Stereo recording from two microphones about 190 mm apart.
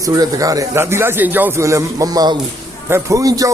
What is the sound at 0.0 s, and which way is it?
A man's voice, 20° right (ahead or behind).